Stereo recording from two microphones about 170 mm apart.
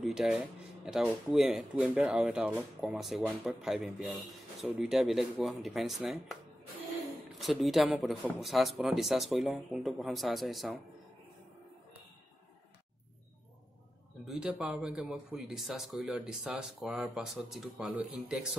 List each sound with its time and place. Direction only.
0.0 s speech: centre (ahead or behind)
7.3 s speech: centre (ahead or behind)
14.2 s speech: 5° right (ahead or behind)